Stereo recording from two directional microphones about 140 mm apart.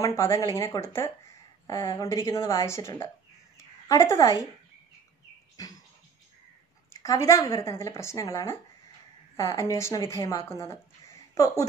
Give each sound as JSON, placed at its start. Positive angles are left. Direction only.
{"t": 0.0, "sound": "speech", "side_deg": 20}
{"t": 3.5, "sound": "a sound", "side_deg": 20}
{"t": 6.9, "sound": "speech", "side_deg": 25}